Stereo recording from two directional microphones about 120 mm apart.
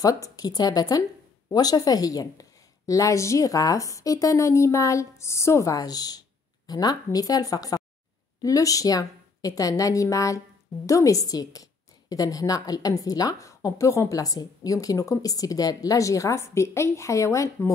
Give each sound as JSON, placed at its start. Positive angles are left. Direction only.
{"t": 0.0, "sound": "a woman's voice", "side_deg": 30}